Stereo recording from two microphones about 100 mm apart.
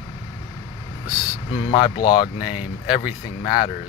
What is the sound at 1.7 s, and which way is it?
Speech, 60° left (ahead or behind).